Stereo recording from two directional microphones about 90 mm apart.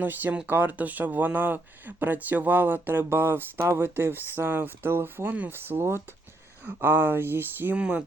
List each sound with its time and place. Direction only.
0.0 s speech: 20° right (ahead or behind)